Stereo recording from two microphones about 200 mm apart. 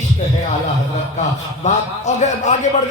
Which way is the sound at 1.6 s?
35° left (ahead or behind).